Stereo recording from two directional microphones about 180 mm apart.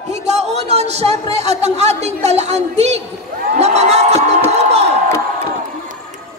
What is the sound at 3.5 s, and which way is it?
Crowd, 35° right (ahead or behind).